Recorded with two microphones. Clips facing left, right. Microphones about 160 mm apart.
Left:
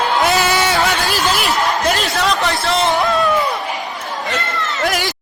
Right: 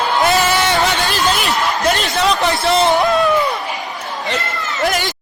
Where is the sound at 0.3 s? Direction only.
5° left (ahead or behind).